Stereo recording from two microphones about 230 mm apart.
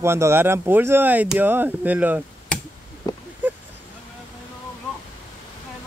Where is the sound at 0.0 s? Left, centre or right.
Centre.